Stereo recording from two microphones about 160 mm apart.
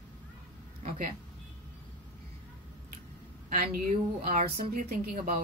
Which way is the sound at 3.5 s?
65° right (ahead or behind).